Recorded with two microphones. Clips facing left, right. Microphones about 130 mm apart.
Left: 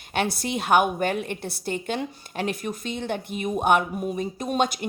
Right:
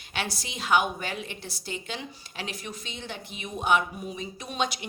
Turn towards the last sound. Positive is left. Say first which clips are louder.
# left 6 dB
turn(degrees=50)  # may be behind; listen again after turning